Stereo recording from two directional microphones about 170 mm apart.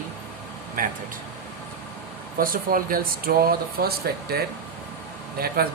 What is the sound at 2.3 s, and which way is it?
Speech, 55° right (ahead or behind).